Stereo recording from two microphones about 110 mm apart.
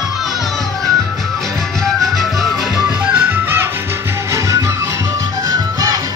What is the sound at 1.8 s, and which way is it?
Music, centre (ahead or behind).